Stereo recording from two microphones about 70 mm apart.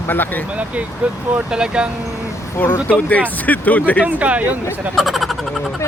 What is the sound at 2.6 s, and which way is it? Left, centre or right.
Speech, left.